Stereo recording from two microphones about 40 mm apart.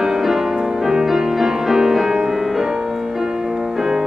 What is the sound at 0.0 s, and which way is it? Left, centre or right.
Music, centre.